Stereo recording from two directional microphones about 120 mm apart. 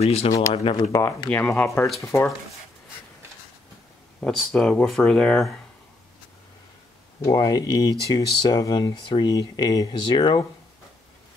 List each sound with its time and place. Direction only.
0.0 s speech: 60° left (ahead or behind)
0.9 s speech: 30° left (ahead or behind)
1.3 s speech: 10° left (ahead or behind)
2.0 s speech: 20° left (ahead or behind)
4.2 s speech: 5° left (ahead or behind)
7.2 s speech: 30° left (ahead or behind)